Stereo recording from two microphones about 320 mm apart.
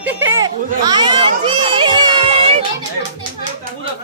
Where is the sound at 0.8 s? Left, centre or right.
Centre.